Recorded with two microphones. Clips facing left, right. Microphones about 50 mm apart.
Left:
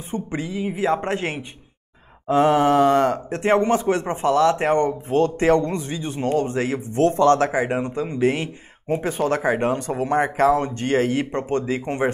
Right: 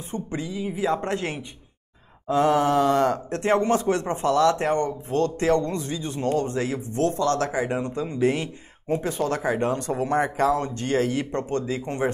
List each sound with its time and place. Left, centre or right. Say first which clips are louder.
0.1 s speech: left 3 dB; left
1.0 s speech: left 3 dB; centre
6.7 s speech: left 5 dB; left
7.9 s speech: left 2 dB; centre
9.8 s speech: left 1 dB; centre
10.0 s speech: left 4 dB; left